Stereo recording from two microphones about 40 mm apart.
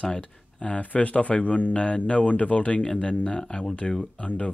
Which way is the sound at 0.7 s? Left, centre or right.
Left.